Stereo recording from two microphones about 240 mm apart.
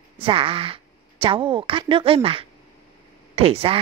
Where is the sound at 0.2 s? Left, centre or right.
Right.